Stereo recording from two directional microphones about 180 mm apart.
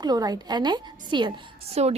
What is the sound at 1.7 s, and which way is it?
Speech, 35° right (ahead or behind).